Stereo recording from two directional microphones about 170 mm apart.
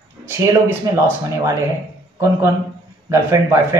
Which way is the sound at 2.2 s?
15° right (ahead or behind).